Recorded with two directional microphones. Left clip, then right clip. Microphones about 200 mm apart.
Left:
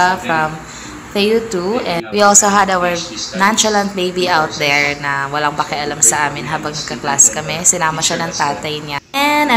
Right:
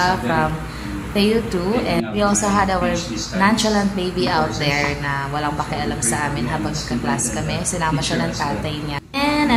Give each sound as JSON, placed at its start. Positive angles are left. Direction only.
{"t": 0.0, "sound": "a woman's voice", "side_deg": 20}